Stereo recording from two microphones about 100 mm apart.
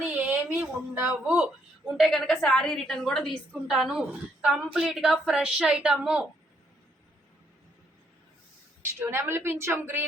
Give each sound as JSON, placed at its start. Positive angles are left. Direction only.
{"t": 0.0, "sound": "a sound", "side_deg": -15}
{"t": 2.0, "sound": "a woman's voice", "side_deg": 0}
{"t": 8.8, "sound": "a woman's voice", "side_deg": -25}